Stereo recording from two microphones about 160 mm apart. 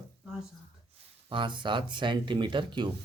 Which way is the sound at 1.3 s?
30° right (ahead or behind).